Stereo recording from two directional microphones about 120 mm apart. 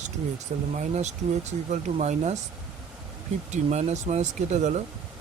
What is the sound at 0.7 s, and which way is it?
Speech, 75° right (ahead or behind).